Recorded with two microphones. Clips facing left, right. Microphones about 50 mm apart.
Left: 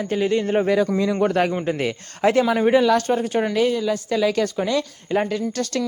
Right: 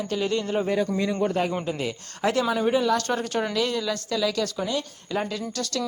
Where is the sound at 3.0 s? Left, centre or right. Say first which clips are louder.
Left 5 dB; centre.